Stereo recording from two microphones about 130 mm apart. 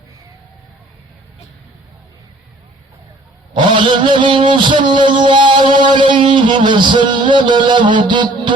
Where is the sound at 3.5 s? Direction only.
40° right (ahead or behind).